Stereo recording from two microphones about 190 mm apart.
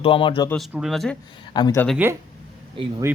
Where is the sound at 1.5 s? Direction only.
20° left (ahead or behind).